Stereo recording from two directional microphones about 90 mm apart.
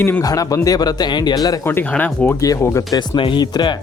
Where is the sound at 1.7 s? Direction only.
20° left (ahead or behind).